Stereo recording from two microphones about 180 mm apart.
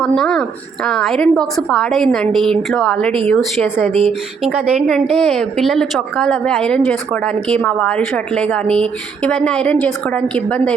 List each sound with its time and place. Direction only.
0.0 s a woman's voice: centre (ahead or behind)